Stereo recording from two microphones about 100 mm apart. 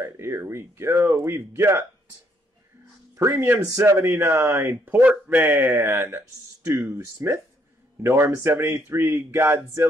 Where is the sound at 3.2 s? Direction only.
25° right (ahead or behind).